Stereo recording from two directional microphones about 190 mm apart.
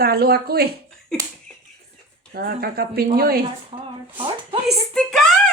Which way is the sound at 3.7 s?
25° right (ahead or behind).